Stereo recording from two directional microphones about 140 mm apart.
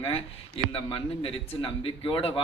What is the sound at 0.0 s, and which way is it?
A man's voice, 40° left (ahead or behind).